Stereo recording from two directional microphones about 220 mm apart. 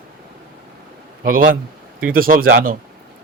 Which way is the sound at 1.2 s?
40° right (ahead or behind).